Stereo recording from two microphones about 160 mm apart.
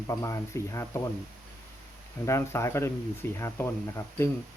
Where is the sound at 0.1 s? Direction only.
20° left (ahead or behind).